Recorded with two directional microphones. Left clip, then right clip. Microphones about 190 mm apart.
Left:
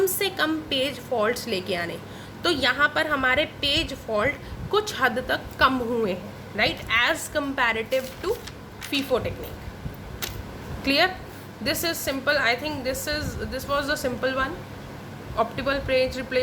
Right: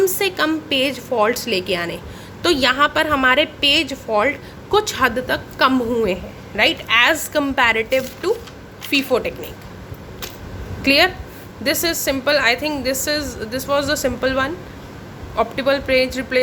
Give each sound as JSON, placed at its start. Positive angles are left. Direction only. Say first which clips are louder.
{"t": 0.0, "sound": "a woman's voice", "louder": "right 6 dB", "side_deg": -20}
{"t": 10.8, "sound": "a woman's voice", "louder": "right 7 dB", "side_deg": -25}